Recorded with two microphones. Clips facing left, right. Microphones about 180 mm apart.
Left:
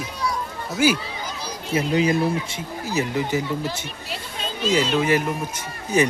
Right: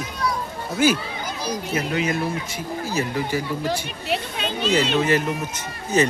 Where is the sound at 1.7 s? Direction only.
25° left (ahead or behind).